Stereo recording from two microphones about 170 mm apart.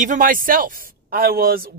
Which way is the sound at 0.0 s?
50° right (ahead or behind).